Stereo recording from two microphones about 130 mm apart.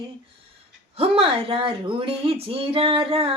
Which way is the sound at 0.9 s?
50° right (ahead or behind).